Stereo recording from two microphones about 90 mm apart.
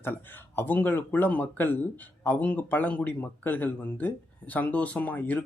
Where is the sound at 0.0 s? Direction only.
25° left (ahead or behind).